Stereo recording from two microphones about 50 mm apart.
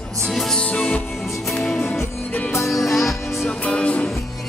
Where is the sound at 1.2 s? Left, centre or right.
Centre.